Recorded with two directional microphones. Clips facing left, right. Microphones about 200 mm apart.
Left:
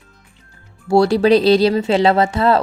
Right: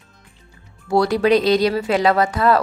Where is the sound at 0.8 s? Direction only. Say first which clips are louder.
Left 4 dB; 30° left (ahead or behind).